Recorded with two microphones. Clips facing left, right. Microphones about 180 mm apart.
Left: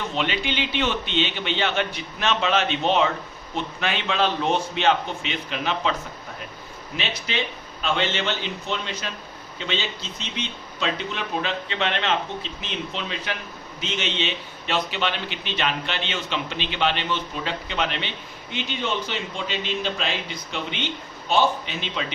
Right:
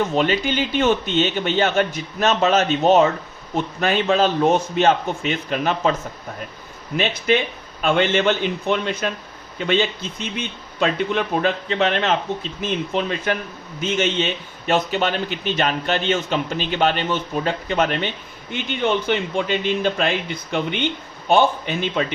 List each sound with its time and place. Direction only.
0.0 s a man's voice: 45° right (ahead or behind)